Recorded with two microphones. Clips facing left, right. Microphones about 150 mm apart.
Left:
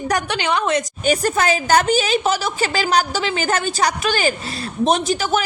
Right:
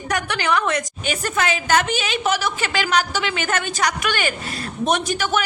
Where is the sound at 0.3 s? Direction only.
20° left (ahead or behind).